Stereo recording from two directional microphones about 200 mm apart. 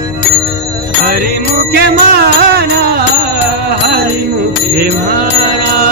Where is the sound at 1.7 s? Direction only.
50° right (ahead or behind).